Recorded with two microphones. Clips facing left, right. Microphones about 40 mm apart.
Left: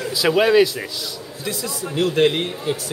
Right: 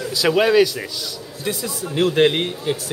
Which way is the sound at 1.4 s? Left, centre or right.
Centre.